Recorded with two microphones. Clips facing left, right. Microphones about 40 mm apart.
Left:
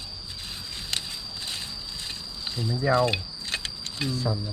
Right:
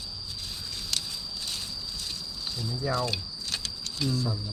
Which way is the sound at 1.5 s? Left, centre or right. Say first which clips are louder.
Left 2 dB; left.